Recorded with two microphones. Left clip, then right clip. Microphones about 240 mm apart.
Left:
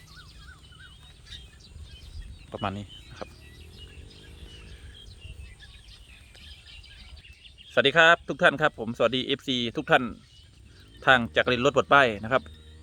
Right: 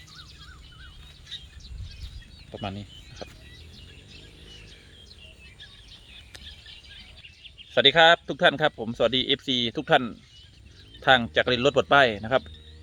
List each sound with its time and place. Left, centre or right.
2.5 s speech: centre
7.7 s a man's voice: centre